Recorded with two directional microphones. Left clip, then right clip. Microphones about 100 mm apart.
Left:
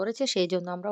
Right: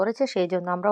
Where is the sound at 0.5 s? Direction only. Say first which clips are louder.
Right 3 dB; 50° left (ahead or behind).